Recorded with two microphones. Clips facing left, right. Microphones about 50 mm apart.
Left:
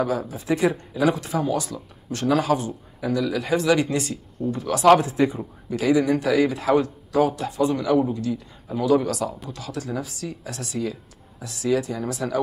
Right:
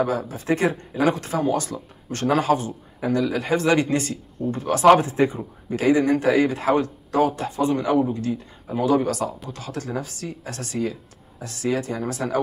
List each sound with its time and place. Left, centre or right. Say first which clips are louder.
0.3 s speech: even; right